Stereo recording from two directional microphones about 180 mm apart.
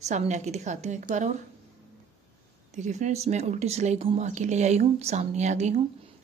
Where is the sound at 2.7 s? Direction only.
40° right (ahead or behind).